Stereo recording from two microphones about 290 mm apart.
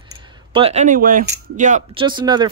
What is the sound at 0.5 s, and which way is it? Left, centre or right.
Speech, centre.